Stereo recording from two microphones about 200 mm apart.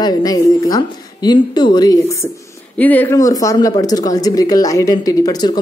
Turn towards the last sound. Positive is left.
turn(degrees=20)  # may be behind; listen again after turning